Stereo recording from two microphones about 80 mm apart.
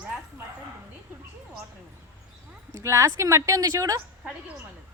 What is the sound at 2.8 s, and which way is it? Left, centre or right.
Speech, right.